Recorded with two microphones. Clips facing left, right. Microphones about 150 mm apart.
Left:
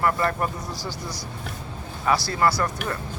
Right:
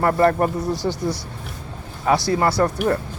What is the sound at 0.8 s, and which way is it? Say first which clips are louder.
Speech: right 10 dB; 65° right (ahead or behind).